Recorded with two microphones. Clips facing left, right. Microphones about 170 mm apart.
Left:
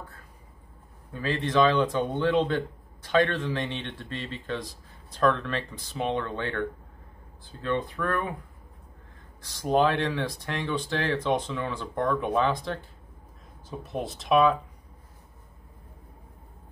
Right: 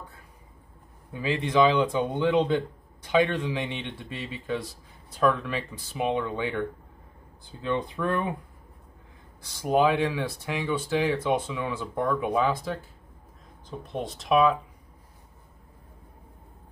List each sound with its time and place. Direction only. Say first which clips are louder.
1.1 s speech: right 1 dB; 10° right (ahead or behind)
9.4 s speech: right 1 dB; 10° right (ahead or behind)